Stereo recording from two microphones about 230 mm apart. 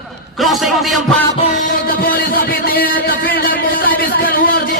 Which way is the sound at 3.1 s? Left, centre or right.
Left.